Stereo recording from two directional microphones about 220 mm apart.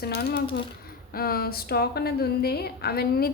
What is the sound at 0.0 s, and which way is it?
A woman's voice, 45° left (ahead or behind).